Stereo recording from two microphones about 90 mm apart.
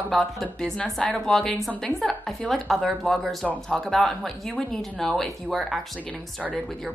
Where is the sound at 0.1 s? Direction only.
5° left (ahead or behind).